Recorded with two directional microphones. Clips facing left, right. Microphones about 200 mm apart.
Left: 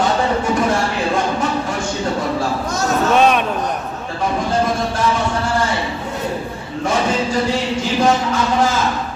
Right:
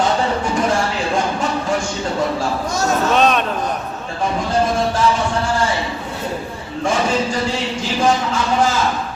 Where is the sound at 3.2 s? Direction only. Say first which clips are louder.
Left 2 dB; 10° left (ahead or behind).